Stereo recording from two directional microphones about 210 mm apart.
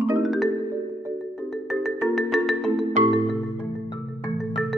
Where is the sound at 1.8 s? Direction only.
Centre (ahead or behind).